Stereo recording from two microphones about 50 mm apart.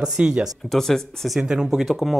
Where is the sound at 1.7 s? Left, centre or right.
Centre.